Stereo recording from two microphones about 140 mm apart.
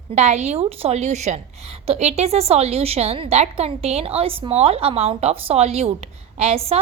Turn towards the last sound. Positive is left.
turn(degrees=-45)  # may be behind; listen again after turning